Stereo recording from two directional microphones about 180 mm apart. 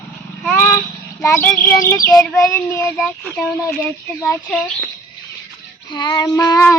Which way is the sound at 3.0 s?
5° left (ahead or behind).